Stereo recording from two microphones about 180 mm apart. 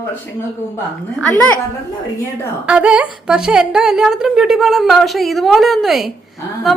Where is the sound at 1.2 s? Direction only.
10° left (ahead or behind).